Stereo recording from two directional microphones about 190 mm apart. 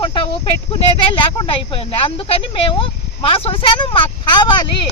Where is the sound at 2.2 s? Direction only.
30° left (ahead or behind).